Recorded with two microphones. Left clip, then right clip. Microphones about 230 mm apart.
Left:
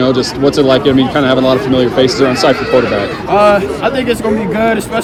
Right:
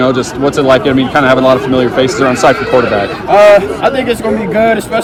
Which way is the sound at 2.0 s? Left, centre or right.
Right.